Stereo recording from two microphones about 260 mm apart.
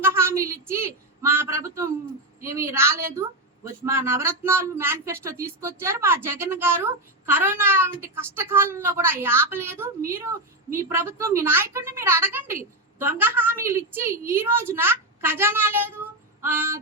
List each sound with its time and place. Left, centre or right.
0.0 s speech: centre